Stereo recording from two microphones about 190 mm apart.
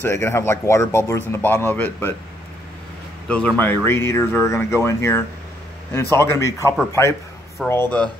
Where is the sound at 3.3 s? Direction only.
5° left (ahead or behind).